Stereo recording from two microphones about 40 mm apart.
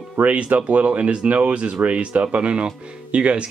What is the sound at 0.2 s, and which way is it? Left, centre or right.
Speech, right.